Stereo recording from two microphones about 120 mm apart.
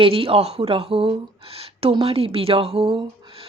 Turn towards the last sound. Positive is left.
turn(degrees=-50)  # may be behind; listen again after turning